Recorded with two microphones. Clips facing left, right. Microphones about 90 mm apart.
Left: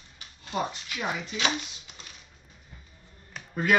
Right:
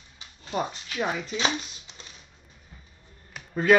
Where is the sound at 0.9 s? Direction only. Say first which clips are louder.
Right 5 dB; 35° right (ahead or behind).